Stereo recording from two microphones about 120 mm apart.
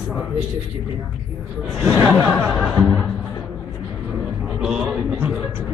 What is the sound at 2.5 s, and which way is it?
Speech, 5° right (ahead or behind).